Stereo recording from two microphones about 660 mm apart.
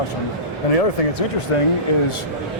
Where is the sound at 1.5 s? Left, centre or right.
Left.